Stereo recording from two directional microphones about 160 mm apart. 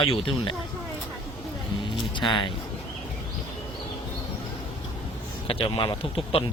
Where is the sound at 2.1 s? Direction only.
30° left (ahead or behind).